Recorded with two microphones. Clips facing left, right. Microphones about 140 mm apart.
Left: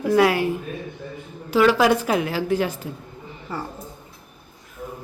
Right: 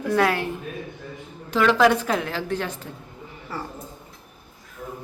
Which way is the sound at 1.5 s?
10° left (ahead or behind).